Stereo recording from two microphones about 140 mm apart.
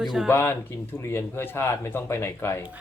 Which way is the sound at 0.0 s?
5° right (ahead or behind).